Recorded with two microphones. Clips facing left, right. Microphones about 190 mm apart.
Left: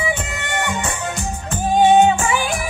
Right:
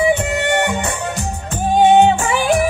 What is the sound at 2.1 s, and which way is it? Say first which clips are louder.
Yodeling: right 2 dB; 35° right (ahead or behind).